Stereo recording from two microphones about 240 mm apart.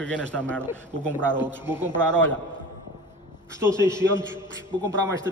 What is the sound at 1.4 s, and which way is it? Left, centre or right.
Speech, centre.